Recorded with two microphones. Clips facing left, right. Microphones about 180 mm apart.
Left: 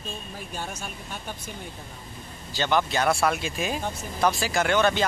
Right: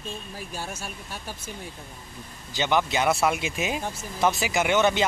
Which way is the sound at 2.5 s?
20° right (ahead or behind).